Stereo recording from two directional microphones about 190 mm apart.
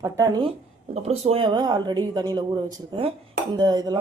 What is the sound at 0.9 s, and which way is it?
Speech, 35° right (ahead or behind).